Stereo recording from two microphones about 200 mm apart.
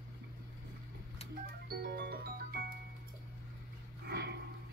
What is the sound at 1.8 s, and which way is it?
Music, 55° right (ahead or behind).